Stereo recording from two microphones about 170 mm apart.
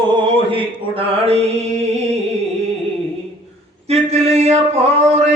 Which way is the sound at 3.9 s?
40° right (ahead or behind).